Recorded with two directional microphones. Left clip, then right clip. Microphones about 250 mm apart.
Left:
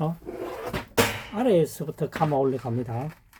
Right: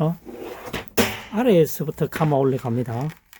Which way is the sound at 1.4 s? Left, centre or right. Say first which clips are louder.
Right 4 dB; right.